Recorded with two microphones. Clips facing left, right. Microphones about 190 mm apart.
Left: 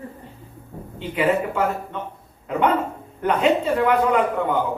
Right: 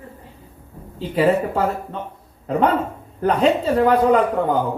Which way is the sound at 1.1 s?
35° right (ahead or behind).